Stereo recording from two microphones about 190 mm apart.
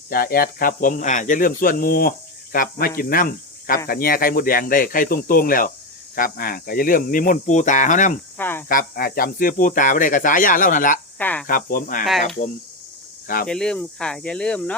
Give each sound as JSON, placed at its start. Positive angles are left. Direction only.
{"t": 0.1, "sound": "speech", "side_deg": 50}
{"t": 8.4, "sound": "speech", "side_deg": 10}
{"t": 8.7, "sound": "speech", "side_deg": 50}
{"t": 11.2, "sound": "speech", "side_deg": 10}
{"t": 11.4, "sound": "speech", "side_deg": 50}
{"t": 13.2, "sound": "speech", "side_deg": 50}
{"t": 13.5, "sound": "speech", "side_deg": 5}